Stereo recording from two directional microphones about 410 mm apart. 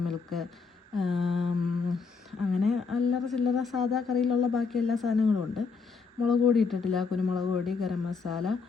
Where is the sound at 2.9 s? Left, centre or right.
Centre.